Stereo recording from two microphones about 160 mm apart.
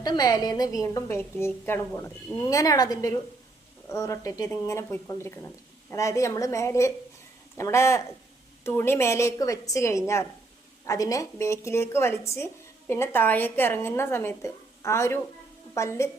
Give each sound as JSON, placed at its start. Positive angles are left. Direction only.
{"t": 0.0, "sound": "a woman's voice", "side_deg": 25}